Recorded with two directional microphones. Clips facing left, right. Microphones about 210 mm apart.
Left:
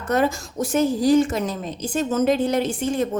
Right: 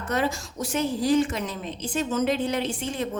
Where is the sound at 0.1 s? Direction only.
50° left (ahead or behind).